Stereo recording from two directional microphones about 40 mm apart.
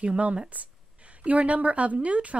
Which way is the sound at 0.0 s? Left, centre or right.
Right.